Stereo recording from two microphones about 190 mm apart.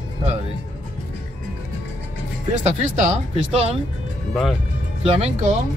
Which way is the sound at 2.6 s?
35° right (ahead or behind).